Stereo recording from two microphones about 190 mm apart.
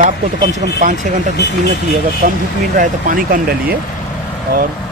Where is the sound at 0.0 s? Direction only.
20° right (ahead or behind).